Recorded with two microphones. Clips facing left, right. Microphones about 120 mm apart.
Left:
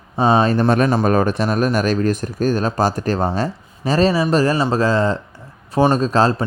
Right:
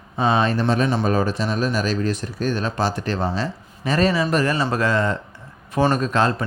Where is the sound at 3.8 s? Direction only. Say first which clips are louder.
Left 3 dB; 30° left (ahead or behind).